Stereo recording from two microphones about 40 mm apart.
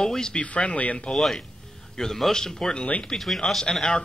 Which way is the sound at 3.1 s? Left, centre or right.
Centre.